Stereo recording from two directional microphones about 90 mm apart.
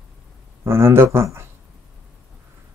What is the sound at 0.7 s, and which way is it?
Speech, 30° right (ahead or behind).